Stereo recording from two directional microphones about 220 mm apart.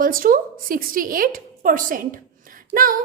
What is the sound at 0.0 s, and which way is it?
A woman's voice, 40° right (ahead or behind).